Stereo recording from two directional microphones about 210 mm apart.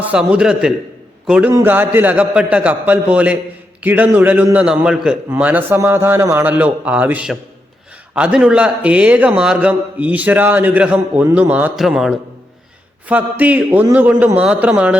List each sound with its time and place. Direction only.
0.0 s a man's voice: 5° right (ahead or behind)